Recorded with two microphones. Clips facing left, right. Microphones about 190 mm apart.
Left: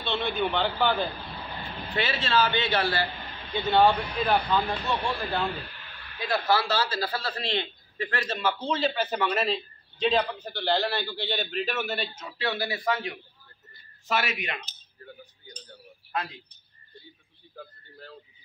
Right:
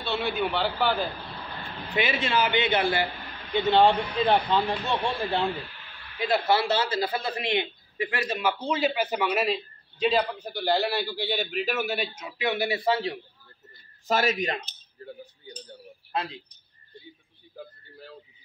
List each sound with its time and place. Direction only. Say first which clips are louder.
0.0 s a man's voice: even; 5° right (ahead or behind)
2.0 s a man's voice: right 1 dB; 15° right (ahead or behind); by 14.6 s 40° right (ahead or behind)